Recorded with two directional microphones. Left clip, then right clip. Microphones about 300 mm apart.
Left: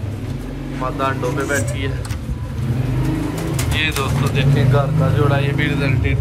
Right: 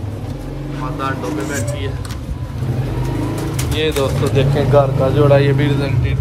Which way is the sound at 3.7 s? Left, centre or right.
Centre.